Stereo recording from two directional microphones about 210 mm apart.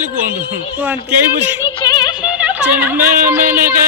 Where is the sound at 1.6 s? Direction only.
20° left (ahead or behind).